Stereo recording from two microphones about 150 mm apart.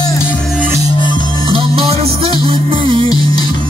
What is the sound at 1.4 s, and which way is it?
Music, 35° right (ahead or behind).